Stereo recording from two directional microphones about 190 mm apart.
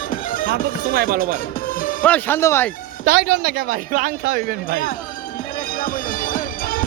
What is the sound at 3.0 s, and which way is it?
Speech, 55° right (ahead or behind).